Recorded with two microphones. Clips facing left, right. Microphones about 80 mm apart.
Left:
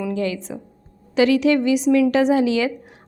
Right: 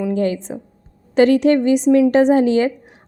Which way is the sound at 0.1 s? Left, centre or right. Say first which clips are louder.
Right 4 dB; right.